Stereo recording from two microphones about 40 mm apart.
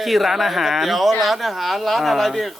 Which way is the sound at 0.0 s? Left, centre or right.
Centre.